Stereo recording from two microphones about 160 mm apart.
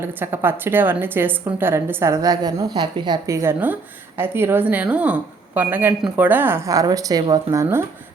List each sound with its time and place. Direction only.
0.0 s speech: 10° right (ahead or behind)